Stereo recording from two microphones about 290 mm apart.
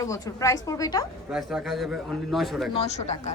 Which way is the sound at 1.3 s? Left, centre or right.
Centre.